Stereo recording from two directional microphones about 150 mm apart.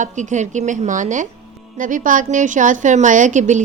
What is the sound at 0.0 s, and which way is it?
A woman's voice, 55° right (ahead or behind).